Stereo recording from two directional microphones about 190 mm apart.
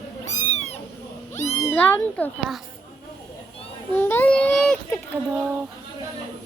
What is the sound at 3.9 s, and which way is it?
Speech, 10° left (ahead or behind).